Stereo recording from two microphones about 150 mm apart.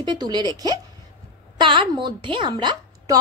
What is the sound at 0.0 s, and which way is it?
A woman's voice, 30° right (ahead or behind).